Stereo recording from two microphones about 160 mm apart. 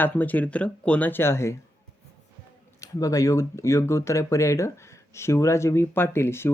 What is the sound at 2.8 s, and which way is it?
Speech, 20° left (ahead or behind).